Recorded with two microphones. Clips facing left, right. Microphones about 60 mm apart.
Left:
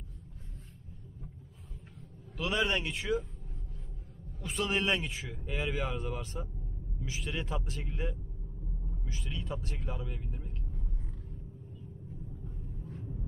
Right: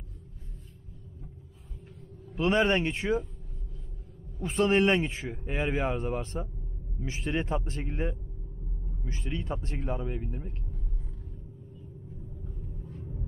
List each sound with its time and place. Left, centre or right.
2.3 s a man's voice: right
4.4 s a man's voice: right
12.9 s rumble: centre